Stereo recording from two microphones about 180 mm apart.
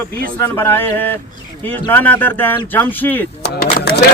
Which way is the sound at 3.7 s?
60° left (ahead or behind).